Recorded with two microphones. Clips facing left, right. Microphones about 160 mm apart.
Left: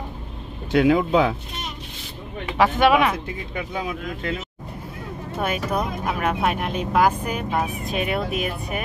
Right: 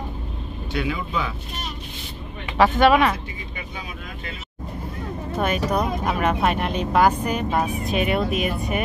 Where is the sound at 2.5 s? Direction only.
5° left (ahead or behind).